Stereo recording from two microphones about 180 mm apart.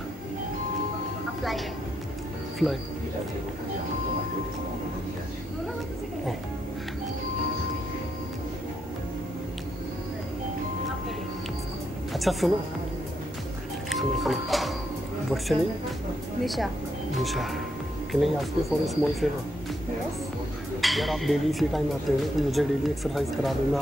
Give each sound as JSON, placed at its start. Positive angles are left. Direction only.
{"t": 12.1, "sound": "music", "side_deg": 0}
{"t": 13.8, "sound": "music", "side_deg": 0}
{"t": 17.2, "sound": "speech", "side_deg": 0}
{"t": 20.8, "sound": "speech", "side_deg": 0}